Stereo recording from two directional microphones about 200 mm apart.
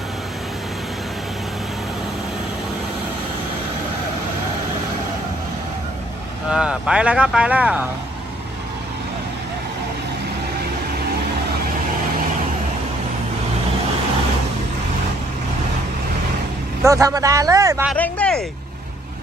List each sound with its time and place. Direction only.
6.5 s speech: 5° right (ahead or behind)
16.8 s a man's voice: 15° right (ahead or behind)
17.9 s speech: 5° left (ahead or behind)